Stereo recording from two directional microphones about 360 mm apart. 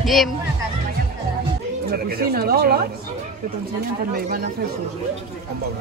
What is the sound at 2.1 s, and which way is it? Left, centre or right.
Speech, right.